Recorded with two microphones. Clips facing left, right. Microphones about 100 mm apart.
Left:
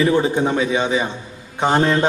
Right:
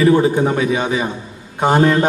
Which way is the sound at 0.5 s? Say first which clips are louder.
Right 1 dB; 25° left (ahead or behind).